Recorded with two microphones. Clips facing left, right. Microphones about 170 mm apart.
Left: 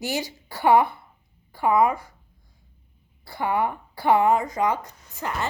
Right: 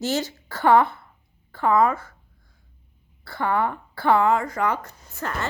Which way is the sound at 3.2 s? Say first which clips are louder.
Right 1 dB; 15° left (ahead or behind).